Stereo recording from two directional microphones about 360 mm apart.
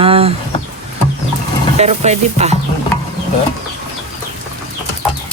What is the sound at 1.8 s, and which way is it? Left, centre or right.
Speech, centre.